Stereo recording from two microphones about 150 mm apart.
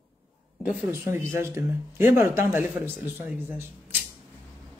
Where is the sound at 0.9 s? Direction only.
15° right (ahead or behind).